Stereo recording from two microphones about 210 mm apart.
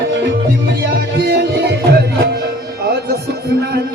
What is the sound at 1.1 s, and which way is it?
Music, 50° right (ahead or behind).